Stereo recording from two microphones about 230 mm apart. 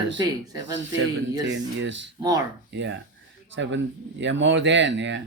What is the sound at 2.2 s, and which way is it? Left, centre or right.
Speech, centre.